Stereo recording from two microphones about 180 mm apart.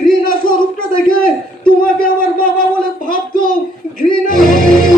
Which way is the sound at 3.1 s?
50° left (ahead or behind).